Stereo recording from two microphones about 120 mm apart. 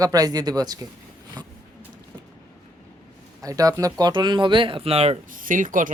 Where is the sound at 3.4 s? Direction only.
30° right (ahead or behind).